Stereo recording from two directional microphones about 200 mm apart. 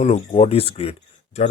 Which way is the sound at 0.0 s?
35° left (ahead or behind).